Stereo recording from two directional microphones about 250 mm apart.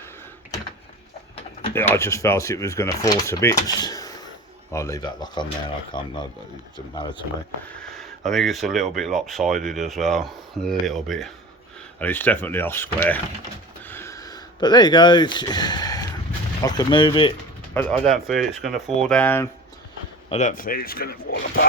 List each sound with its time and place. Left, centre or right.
1.7 s speech: centre
7.8 s speech: centre
13.8 s a sound: centre
16.6 s speech: centre
17.7 s speech: centre
20.3 s speech: left